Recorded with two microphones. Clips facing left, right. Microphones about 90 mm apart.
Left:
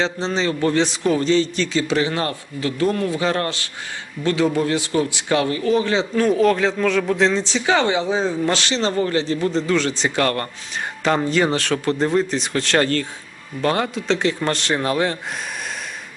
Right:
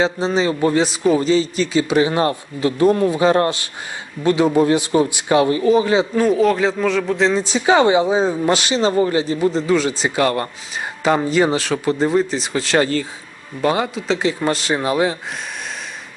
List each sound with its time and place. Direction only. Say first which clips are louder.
0.0 s a man's voice: right 4 dB; 10° right (ahead or behind)
5.7 s speech: right 3 dB; 10° right (ahead or behind)
7.5 s a man's voice: right 5 dB; 20° right (ahead or behind)